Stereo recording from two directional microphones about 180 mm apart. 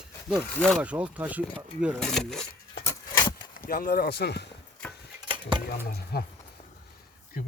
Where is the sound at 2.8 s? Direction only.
20° left (ahead or behind).